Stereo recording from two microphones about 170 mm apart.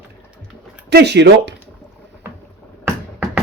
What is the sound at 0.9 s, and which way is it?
Speech, 80° right.